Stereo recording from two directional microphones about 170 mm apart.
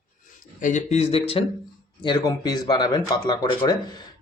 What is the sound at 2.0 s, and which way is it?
Speech, 25° left (ahead or behind).